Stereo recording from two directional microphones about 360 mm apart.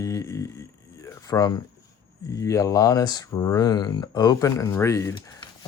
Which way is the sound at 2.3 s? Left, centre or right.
Centre.